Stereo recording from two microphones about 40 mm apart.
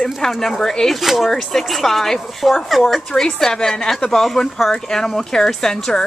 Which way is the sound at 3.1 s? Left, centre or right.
Centre.